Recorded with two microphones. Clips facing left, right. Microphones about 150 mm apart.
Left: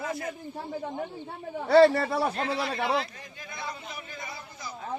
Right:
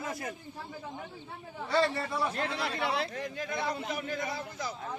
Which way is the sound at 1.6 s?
70° left (ahead or behind).